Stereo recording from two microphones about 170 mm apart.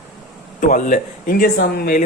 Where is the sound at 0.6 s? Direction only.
50° left (ahead or behind).